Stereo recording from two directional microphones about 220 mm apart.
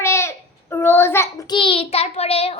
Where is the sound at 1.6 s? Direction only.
25° left (ahead or behind).